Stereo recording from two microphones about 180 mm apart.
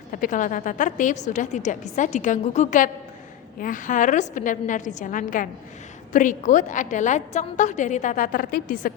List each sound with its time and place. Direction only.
0.1 s a woman's voice: 45° left (ahead or behind)